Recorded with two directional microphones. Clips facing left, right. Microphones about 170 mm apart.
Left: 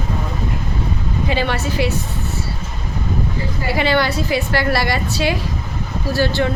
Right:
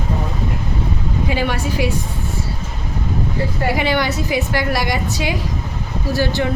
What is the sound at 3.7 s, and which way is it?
A woman's voice, 15° right (ahead or behind).